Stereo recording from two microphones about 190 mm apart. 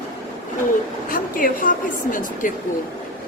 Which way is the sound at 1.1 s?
45° left (ahead or behind).